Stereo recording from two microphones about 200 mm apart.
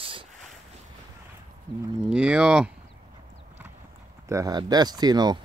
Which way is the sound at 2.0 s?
5° right (ahead or behind).